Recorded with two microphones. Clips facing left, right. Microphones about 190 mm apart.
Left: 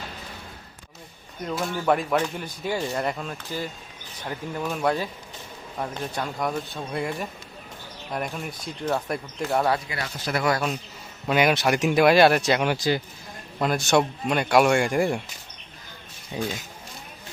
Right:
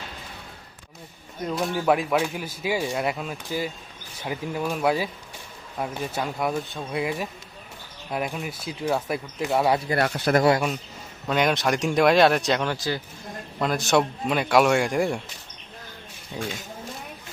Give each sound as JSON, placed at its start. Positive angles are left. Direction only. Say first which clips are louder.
{"t": 1.5, "sound": "speech", "louder": "right 1 dB", "side_deg": 0}
{"t": 9.9, "sound": "speech", "louder": "right 8 dB", "side_deg": -60}
{"t": 11.3, "sound": "speech", "louder": "left 1 dB", "side_deg": 5}
{"t": 12.6, "sound": "speech", "louder": "left 4 dB", "side_deg": 15}
{"t": 13.6, "sound": "speech", "louder": "even", "side_deg": 0}